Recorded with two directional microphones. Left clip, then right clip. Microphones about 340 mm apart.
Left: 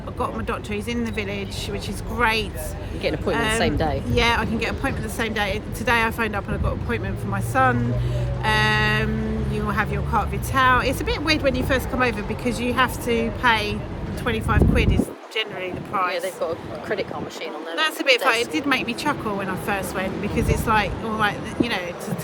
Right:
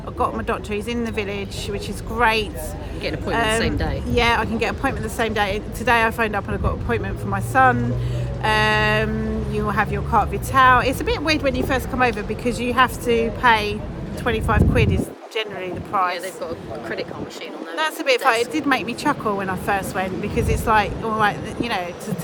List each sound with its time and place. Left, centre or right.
0.2 s speech: centre
3.0 s a woman's voice: centre
3.3 s speech: centre
3.6 s a woman's voice: centre
4.1 s speech: centre
16.1 s a woman's voice: centre
17.7 s speech: centre